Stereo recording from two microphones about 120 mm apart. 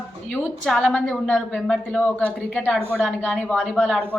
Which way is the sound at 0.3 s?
10° left (ahead or behind).